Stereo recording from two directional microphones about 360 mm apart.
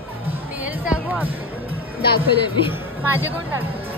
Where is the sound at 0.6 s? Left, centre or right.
Centre.